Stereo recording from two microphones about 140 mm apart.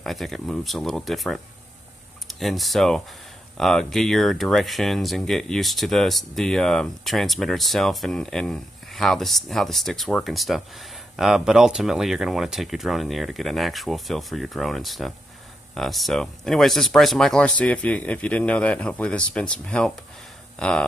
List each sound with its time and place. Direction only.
0.0 s speech: centre (ahead or behind)